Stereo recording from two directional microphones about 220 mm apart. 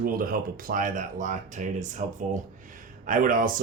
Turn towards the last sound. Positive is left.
turn(degrees=-40)  # may be behind; listen again after turning